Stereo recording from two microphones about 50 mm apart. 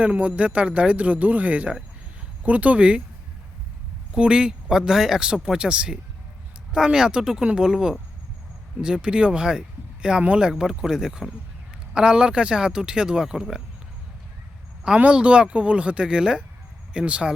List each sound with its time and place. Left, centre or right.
0.0 s speech: right
4.1 s a man's voice: centre
14.9 s speech: right